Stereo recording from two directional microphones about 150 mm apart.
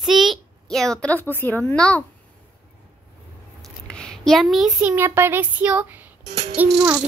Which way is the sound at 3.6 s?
5° left (ahead or behind).